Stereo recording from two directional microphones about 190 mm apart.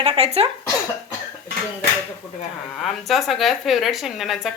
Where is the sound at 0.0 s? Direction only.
30° right (ahead or behind).